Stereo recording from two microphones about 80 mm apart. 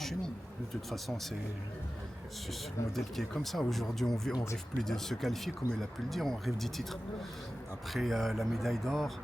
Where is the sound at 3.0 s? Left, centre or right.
Centre.